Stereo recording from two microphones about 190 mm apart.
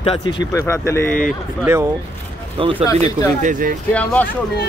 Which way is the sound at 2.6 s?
25° right (ahead or behind).